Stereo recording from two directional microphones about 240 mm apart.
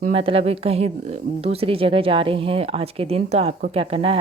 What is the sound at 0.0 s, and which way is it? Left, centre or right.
Speech, right.